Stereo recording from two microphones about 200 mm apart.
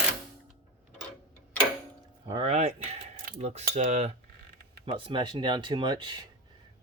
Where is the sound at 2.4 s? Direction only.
35° right (ahead or behind).